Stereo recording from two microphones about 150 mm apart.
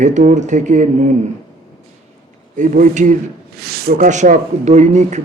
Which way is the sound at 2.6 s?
60° right (ahead or behind).